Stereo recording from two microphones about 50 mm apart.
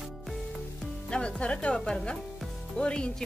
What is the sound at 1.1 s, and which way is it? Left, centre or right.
Speech, left.